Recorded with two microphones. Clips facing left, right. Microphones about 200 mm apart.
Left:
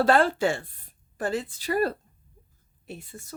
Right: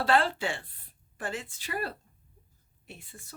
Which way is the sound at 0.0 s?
45° left (ahead or behind).